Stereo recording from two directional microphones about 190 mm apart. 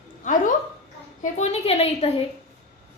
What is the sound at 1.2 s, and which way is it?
Speech, 35° left (ahead or behind).